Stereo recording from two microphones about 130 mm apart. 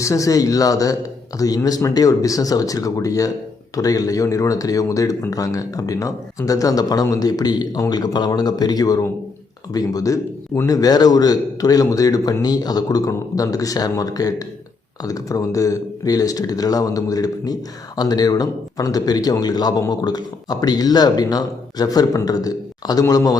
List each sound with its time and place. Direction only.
0.0 s speech: 25° left (ahead or behind)